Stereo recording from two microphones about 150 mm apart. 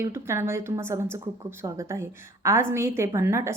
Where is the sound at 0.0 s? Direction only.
15° right (ahead or behind).